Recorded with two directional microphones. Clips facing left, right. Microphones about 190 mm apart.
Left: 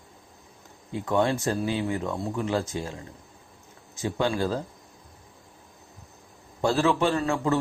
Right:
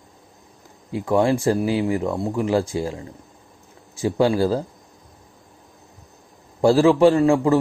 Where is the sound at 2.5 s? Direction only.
30° right (ahead or behind).